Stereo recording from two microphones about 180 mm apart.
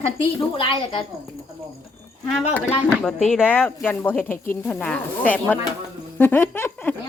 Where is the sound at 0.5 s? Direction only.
30° left (ahead or behind).